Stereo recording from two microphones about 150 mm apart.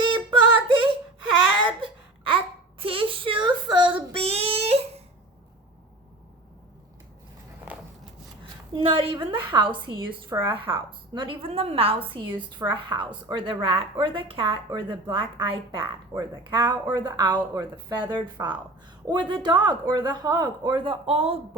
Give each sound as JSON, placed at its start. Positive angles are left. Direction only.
{"t": 0.0, "sound": "female singing", "side_deg": -30}
{"t": 1.6, "sound": "a sound", "side_deg": -35}
{"t": 7.7, "sound": "walk", "side_deg": -10}
{"t": 8.7, "sound": "a woman's voice", "side_deg": -35}